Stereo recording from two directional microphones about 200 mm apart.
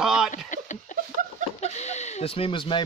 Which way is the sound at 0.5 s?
40° left (ahead or behind).